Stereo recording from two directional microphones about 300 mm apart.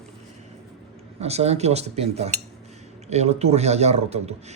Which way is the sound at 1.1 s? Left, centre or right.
Right.